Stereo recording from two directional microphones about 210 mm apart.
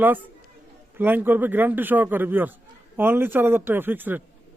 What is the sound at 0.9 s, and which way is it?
A man's voice, 10° right (ahead or behind).